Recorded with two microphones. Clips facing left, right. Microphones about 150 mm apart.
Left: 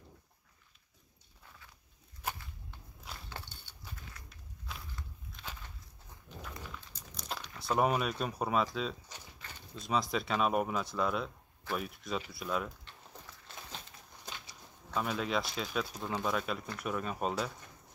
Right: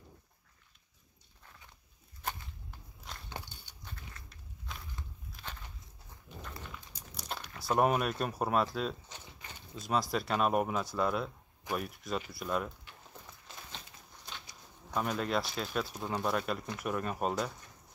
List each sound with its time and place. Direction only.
3.3 s a sound: 15° right (ahead or behind)
3.8 s walk: centre (ahead or behind)
6.9 s crumpling: 5° right (ahead or behind)
9.4 s a sound: 15° right (ahead or behind)
9.8 s speech: centre (ahead or behind)
15.0 s speech: centre (ahead or behind)